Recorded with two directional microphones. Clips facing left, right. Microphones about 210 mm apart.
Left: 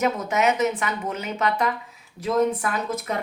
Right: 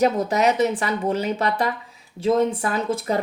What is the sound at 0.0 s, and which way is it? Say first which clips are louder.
Speech: right 3 dB; 35° right (ahead or behind).